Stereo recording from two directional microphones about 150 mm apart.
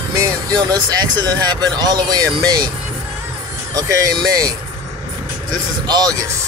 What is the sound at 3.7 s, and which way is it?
Speech, 25° right (ahead or behind).